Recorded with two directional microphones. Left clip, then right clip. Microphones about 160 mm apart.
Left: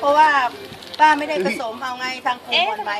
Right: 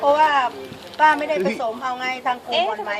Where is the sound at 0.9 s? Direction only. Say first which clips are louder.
Left 1 dB; 15° left (ahead or behind).